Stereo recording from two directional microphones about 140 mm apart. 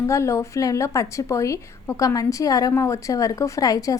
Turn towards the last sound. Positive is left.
turn(degrees=25)  # may be behind; listen again after turning